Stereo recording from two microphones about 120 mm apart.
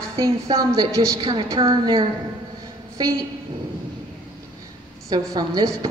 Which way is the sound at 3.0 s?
35° right (ahead or behind).